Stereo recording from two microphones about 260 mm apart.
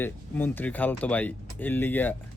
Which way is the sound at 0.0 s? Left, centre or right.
Centre.